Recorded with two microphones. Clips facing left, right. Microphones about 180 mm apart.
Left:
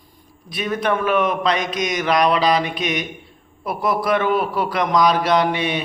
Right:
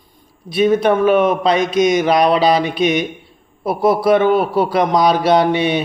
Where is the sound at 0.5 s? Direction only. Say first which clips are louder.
Right 8 dB; 25° right (ahead or behind).